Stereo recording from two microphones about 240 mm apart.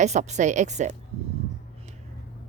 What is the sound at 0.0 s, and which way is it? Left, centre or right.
Speech, right.